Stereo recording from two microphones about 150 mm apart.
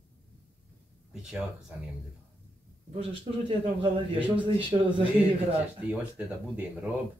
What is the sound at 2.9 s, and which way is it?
Speech, 35° right (ahead or behind).